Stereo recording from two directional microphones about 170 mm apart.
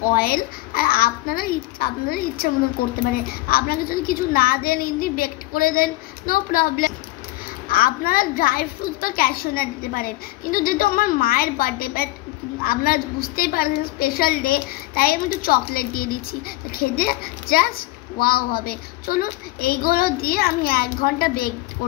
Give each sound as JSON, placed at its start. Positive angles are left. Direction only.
{"t": 0.1, "sound": "a woman's voice", "side_deg": 60}